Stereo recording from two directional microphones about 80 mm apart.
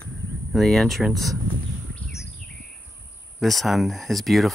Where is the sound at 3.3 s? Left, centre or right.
Centre.